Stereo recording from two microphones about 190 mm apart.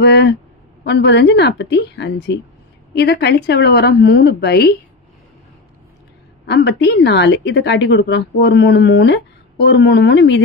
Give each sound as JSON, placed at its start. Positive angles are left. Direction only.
{"t": 0.0, "sound": "a woman's voice", "side_deg": 65}
{"t": 6.4, "sound": "a woman's voice", "side_deg": 65}